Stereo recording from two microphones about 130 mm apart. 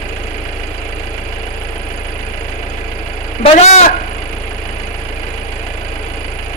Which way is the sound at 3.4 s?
60° left (ahead or behind).